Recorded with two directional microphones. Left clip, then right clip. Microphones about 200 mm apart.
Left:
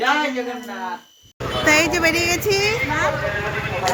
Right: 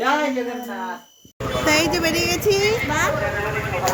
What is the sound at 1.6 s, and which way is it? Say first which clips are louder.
Speech: left 3 dB; 5° left (ahead or behind).